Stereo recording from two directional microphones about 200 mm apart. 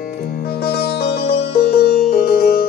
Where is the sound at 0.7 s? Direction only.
50° left (ahead or behind).